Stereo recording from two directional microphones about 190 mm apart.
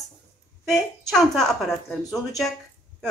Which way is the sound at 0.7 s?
Centre (ahead or behind).